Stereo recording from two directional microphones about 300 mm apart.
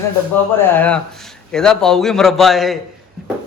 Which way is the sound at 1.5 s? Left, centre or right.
Centre.